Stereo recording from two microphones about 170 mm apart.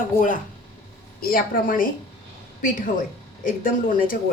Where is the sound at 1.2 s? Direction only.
55° left (ahead or behind).